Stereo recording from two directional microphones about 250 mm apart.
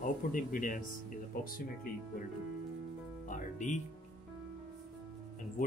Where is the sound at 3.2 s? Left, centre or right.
Left.